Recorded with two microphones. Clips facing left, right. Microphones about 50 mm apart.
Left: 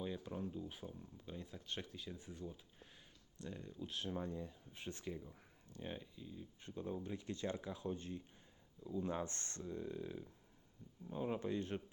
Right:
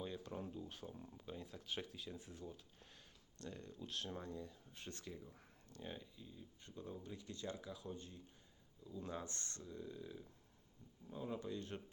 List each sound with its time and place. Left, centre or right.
0.0 s a sound: centre
1.2 s speech: centre
4.2 s speech: left; by 6.4 s centre
6.6 s speech: left